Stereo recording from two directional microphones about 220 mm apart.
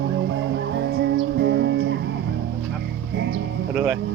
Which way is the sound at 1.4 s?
50° right (ahead or behind).